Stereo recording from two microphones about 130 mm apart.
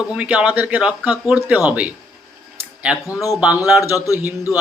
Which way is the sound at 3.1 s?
25° left (ahead or behind).